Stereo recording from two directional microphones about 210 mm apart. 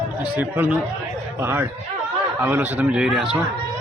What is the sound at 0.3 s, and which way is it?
Speech, 10° right (ahead or behind).